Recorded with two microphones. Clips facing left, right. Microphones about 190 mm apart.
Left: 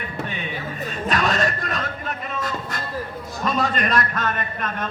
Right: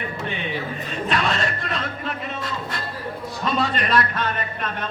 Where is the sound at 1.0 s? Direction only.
45° left (ahead or behind).